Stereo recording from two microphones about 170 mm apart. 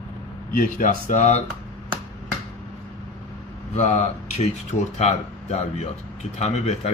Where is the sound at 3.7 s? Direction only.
40° left (ahead or behind).